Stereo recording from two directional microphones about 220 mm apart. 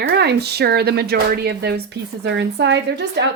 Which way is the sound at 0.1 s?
45° right (ahead or behind).